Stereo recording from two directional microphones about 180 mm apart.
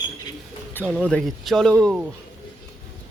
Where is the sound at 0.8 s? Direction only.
5° right (ahead or behind).